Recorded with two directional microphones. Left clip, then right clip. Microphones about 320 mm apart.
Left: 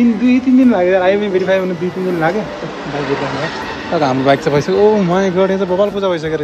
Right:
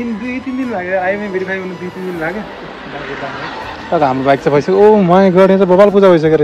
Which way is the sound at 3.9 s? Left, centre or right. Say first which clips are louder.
Right 1 dB; centre.